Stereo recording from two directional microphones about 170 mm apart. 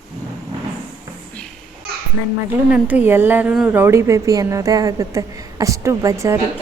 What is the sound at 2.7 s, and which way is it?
A woman's voice, 10° right (ahead or behind).